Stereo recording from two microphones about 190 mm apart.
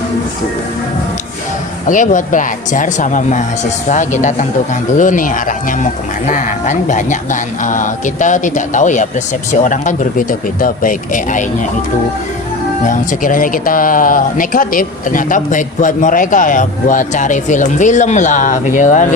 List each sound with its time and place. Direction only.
1.9 s speech: 45° left (ahead or behind)
12.8 s speech: 45° left (ahead or behind)